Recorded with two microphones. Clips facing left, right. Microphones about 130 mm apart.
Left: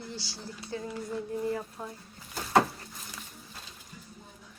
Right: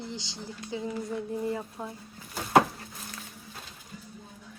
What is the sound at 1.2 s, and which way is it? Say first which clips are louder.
Speech: left 2 dB; 20° right (ahead or behind).